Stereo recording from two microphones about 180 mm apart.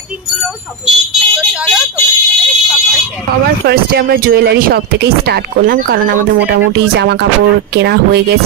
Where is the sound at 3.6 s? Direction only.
60° right (ahead or behind).